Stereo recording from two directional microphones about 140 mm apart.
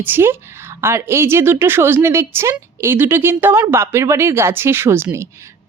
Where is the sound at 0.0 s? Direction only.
15° right (ahead or behind).